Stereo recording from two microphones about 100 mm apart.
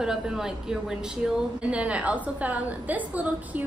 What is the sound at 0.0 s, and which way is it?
A woman's voice, 5° right (ahead or behind).